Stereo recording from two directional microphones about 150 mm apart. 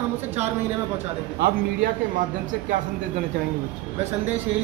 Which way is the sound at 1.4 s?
75° right (ahead or behind).